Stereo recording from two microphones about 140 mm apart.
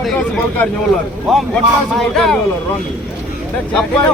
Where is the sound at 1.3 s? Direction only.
Centre (ahead or behind).